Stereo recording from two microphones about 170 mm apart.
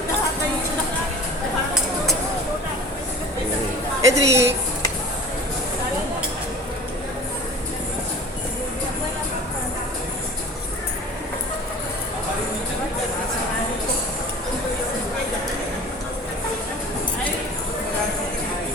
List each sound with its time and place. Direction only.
4.0 s a woman's voice: 15° right (ahead or behind)